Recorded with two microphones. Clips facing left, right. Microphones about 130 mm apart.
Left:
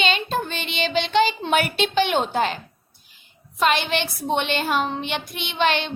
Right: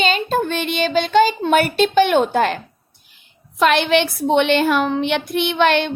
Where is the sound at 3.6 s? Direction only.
60° right (ahead or behind).